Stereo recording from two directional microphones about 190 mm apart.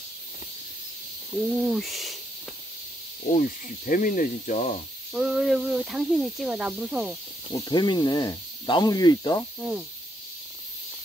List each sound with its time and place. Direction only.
1.5 s speech: centre (ahead or behind)
3.3 s speech: 45° left (ahead or behind)
5.1 s speech: centre (ahead or behind)
7.4 s speech: 20° left (ahead or behind)
9.6 s speech: 5° right (ahead or behind)